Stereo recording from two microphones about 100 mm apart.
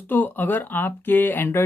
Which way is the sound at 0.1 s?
20° left (ahead or behind).